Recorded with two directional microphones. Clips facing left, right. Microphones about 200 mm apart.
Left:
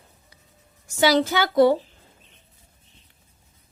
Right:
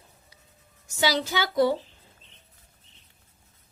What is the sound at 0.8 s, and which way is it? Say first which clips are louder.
Speech: left 7 dB; 55° left (ahead or behind).